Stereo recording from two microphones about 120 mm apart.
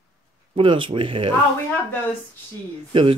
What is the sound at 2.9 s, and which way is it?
Speech, 50° right (ahead or behind).